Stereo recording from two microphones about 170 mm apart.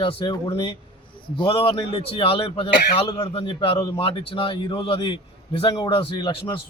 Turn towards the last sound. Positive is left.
turn(degrees=25)  # may be behind; listen again after turning